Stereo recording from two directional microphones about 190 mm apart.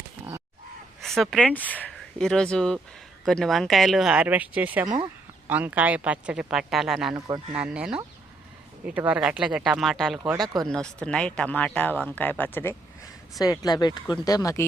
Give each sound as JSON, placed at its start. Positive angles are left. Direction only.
{"t": 1.0, "sound": "speech", "side_deg": 0}
{"t": 7.3, "sound": "speech", "side_deg": -20}
{"t": 7.6, "sound": "speech", "side_deg": -5}
{"t": 10.3, "sound": "speech", "side_deg": -20}
{"t": 10.7, "sound": "speech", "side_deg": 5}